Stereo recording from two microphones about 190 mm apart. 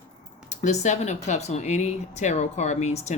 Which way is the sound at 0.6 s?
40° left (ahead or behind).